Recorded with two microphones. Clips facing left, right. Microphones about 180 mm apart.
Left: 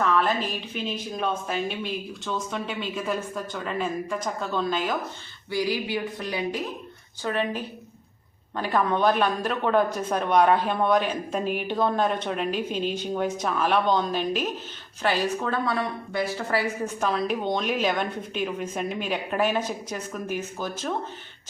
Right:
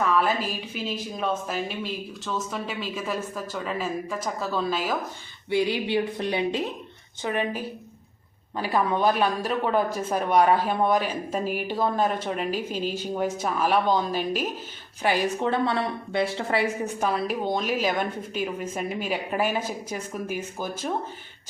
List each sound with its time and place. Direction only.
0.0 s speech: 10° right (ahead or behind)
5.5 s speech: 25° right (ahead or behind)
7.2 s a woman's voice: 15° right (ahead or behind)
17.0 s a woman's voice: 5° right (ahead or behind)